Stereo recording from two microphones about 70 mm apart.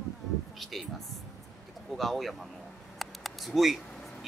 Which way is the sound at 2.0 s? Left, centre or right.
Centre.